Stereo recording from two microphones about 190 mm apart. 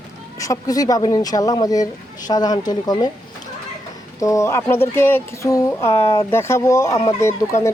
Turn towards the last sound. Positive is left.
turn(degrees=15)  # may be behind; listen again after turning